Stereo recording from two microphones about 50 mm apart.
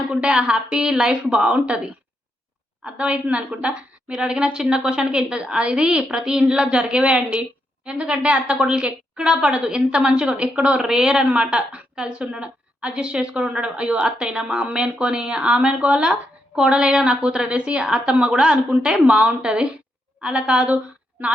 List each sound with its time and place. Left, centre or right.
0.1 s a woman's voice: right